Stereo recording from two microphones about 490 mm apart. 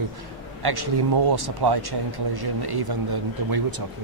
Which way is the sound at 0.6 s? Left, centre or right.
Right.